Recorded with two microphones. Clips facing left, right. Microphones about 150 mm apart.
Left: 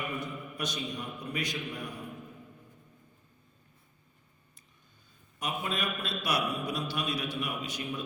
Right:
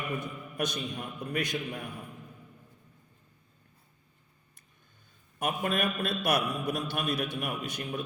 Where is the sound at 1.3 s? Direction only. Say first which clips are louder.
Right 3 dB; 50° right (ahead or behind).